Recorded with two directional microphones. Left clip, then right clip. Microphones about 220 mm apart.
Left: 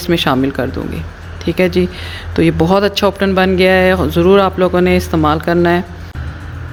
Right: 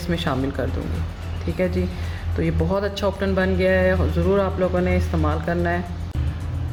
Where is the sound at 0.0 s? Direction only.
40° left (ahead or behind).